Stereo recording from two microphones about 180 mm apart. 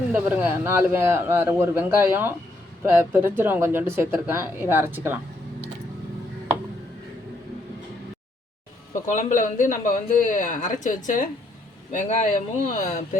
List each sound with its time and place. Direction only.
0.1 s speech: 10° right (ahead or behind)
9.0 s speech: 45° left (ahead or behind)